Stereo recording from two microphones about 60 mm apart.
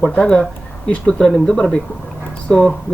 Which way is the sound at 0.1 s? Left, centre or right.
Centre.